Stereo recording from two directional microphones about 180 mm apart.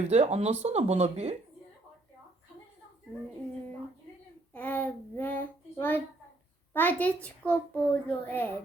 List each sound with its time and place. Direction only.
0.0 s speech: 35° right (ahead or behind)
4.5 s a child's voice: 10° left (ahead or behind)